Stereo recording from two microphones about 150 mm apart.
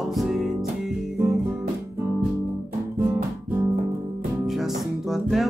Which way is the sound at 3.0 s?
20° right (ahead or behind).